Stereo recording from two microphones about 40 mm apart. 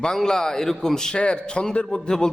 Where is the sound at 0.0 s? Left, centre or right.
Centre.